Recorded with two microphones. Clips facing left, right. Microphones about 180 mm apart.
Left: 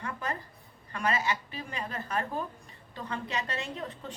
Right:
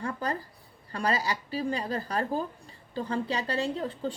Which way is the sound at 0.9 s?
35° right (ahead or behind).